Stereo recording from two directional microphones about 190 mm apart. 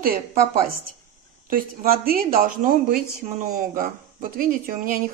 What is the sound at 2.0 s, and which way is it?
Speech, 50° right (ahead or behind).